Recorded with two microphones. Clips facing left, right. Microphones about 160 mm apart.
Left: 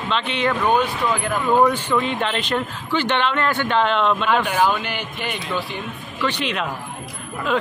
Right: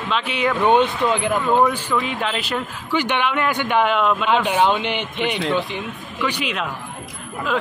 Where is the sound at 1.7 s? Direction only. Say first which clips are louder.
Left 2 dB; 10° right (ahead or behind).